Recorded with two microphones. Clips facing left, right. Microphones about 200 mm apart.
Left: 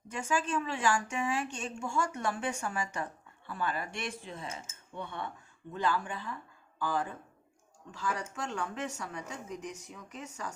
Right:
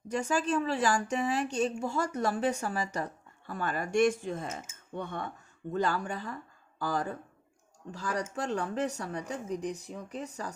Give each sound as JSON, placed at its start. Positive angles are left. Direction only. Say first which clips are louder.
{"t": 0.1, "sound": "a woman's voice", "louder": "right 4 dB", "side_deg": -40}